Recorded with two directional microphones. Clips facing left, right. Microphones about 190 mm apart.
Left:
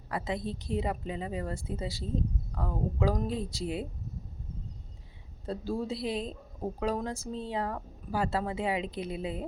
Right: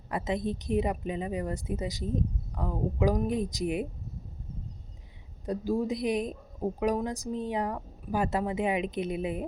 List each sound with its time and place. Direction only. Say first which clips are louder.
0.1 s a woman's voice: right 3 dB; 20° right (ahead or behind)
5.5 s a woman's voice: right 4 dB; 15° right (ahead or behind)